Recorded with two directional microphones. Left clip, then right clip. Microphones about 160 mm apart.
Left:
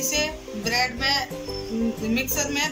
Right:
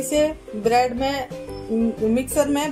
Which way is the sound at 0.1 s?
60° right (ahead or behind).